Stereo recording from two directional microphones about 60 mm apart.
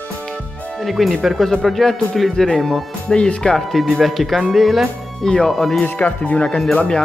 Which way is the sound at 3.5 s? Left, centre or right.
Centre.